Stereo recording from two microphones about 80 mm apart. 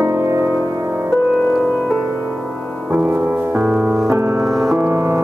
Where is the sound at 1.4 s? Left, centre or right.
Centre.